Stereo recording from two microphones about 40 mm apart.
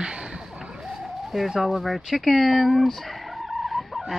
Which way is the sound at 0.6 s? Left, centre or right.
Centre.